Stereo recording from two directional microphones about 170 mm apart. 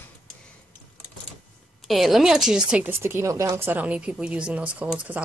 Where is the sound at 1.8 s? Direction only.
Centre (ahead or behind).